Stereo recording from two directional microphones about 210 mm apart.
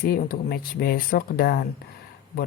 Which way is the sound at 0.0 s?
45° left (ahead or behind).